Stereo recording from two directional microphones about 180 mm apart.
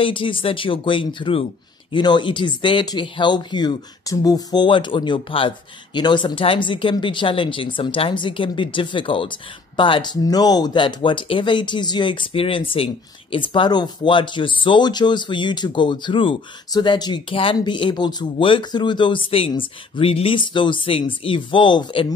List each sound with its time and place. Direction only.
0.0 s speech: 30° left (ahead or behind)